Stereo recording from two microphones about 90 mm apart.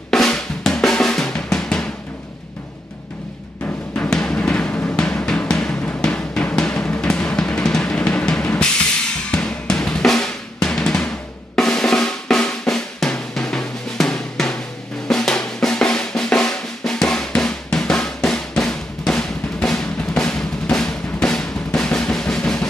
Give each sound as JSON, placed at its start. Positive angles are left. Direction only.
{"t": 0.1, "sound": "drum", "side_deg": 5}
{"t": 3.6, "sound": "music", "side_deg": 15}
{"t": 6.0, "sound": "drum", "side_deg": 10}
{"t": 7.0, "sound": "music", "side_deg": 10}
{"t": 9.3, "sound": "drum", "side_deg": 10}